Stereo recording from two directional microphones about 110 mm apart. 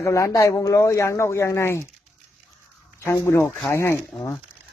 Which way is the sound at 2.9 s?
25° left (ahead or behind).